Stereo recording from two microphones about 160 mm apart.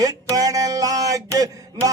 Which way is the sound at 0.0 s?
20° right (ahead or behind).